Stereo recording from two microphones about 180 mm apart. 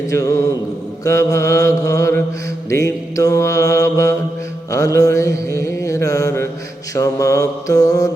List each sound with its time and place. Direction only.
0.1 s mantra: 20° left (ahead or behind)